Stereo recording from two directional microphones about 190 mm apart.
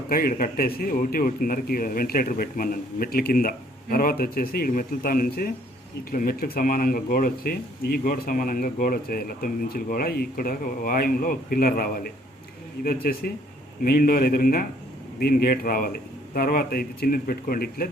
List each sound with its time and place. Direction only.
0.1 s speech: 50° left (ahead or behind)